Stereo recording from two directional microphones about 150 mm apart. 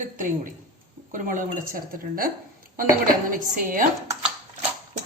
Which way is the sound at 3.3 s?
65° right (ahead or behind).